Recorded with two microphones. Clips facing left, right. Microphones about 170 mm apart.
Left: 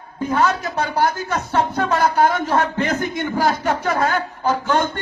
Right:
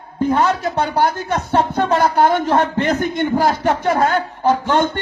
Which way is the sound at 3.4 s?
30° right (ahead or behind).